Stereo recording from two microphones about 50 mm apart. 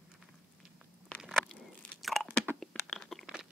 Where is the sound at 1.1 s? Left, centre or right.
Left.